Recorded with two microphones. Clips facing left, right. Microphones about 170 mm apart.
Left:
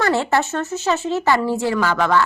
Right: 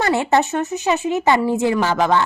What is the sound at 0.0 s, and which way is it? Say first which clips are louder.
A woman's voice: right 1 dB; 20° right (ahead or behind).